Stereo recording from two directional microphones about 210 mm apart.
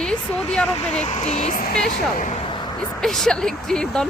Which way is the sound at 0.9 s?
35° left (ahead or behind).